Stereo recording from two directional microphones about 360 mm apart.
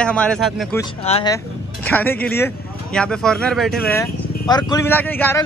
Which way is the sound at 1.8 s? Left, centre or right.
Centre.